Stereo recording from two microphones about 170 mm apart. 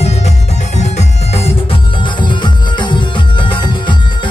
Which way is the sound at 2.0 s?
25° left (ahead or behind).